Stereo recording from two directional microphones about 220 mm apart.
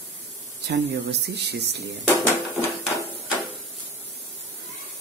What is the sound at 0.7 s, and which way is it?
Speech, 50° right (ahead or behind).